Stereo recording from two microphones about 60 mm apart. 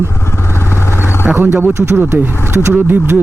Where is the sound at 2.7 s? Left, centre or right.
Right.